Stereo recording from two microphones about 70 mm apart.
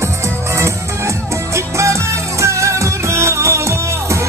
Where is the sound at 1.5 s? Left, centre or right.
Right.